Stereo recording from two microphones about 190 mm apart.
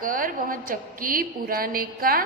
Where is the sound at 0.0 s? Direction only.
45° right (ahead or behind).